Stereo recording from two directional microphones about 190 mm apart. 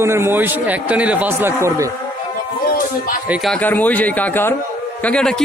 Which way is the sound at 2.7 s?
45° left (ahead or behind).